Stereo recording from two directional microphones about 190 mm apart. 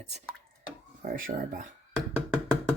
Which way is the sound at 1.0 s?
50° right (ahead or behind).